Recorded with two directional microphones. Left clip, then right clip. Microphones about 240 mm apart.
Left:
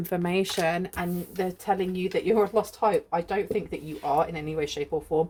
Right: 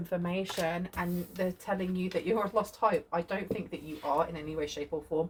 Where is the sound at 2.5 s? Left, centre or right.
Left.